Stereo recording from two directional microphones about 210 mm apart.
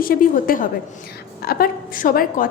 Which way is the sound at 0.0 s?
40° left (ahead or behind).